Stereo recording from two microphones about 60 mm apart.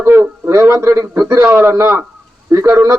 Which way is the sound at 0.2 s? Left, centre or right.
Right.